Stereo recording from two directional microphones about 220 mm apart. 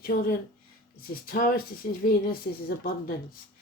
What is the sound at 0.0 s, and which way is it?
Speech, 40° left (ahead or behind).